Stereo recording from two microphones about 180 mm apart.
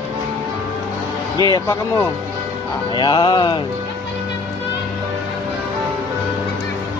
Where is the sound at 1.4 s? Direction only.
20° left (ahead or behind).